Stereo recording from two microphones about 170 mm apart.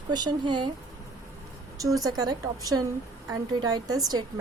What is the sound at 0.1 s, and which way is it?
Speech, 25° right (ahead or behind).